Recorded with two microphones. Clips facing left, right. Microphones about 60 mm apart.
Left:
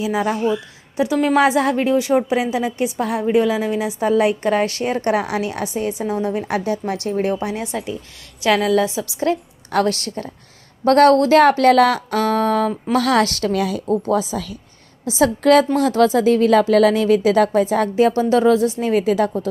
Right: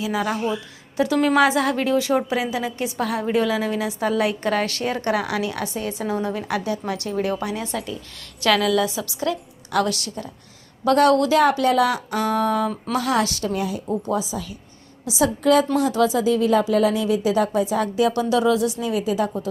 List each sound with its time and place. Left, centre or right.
0.0 s a woman's voice: left
15.0 s a woman's voice: left